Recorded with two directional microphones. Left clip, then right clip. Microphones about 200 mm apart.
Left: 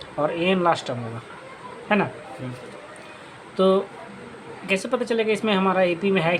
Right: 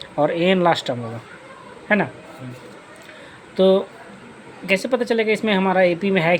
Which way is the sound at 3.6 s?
25° right (ahead or behind).